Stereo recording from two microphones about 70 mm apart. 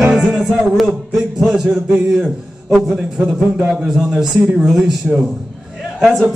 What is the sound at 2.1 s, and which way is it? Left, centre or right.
A man's voice, centre.